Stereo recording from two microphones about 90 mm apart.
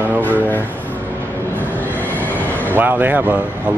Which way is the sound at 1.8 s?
20° left (ahead or behind).